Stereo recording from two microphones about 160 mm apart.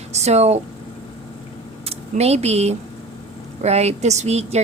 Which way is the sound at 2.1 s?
40° right (ahead or behind).